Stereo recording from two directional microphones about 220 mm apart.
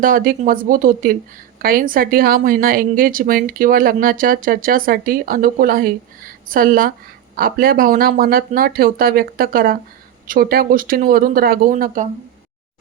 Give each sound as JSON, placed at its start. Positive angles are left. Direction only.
{"t": 0.0, "sound": "a woman's voice", "side_deg": -40}